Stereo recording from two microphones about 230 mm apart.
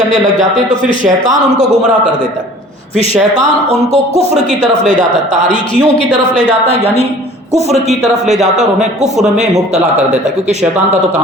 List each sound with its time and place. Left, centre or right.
0.3 s a man's voice: right
1.3 s speech: centre
2.9 s a man's voice: left
3.3 s a man's voice: right
7.7 s a man's voice: centre